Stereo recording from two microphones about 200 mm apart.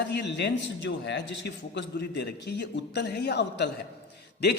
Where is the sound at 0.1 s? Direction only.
60° left (ahead or behind).